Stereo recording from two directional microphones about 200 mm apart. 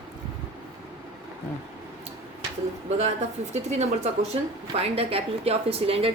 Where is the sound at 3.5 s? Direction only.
35° right (ahead or behind).